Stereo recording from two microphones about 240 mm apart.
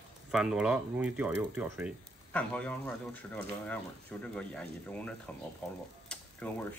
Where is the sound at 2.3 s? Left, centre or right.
Centre.